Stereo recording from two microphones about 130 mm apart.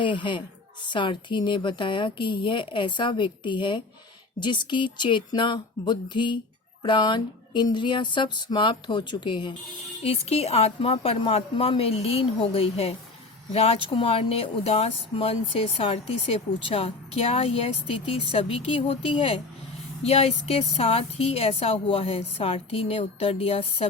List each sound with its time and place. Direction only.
0.0 s speech: 40° left (ahead or behind)
10.0 s a woman's voice: 50° left (ahead or behind)